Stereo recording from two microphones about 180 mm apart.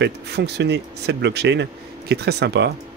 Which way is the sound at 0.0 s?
70° right (ahead or behind).